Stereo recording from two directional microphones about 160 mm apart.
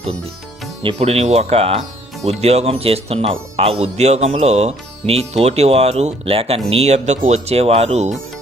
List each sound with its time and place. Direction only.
0.8 s speech: 35° right (ahead or behind)